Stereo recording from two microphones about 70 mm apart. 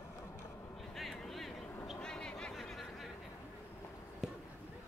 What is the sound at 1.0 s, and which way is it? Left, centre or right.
Vehicle, centre.